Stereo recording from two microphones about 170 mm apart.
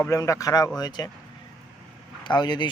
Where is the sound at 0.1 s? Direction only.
20° left (ahead or behind).